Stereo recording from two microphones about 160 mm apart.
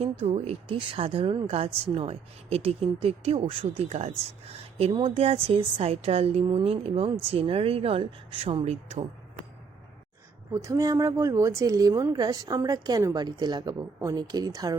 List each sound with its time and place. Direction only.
0.0 s speech: 40° right (ahead or behind)
10.5 s speech: 20° right (ahead or behind)